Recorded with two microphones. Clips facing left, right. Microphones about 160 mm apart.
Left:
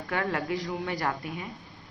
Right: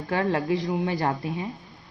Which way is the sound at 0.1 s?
25° right (ahead or behind).